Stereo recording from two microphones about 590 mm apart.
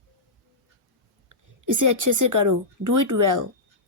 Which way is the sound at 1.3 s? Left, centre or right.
Right.